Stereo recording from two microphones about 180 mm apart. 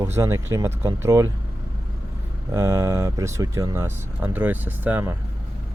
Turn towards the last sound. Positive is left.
turn(degrees=-10)  # may be behind; listen again after turning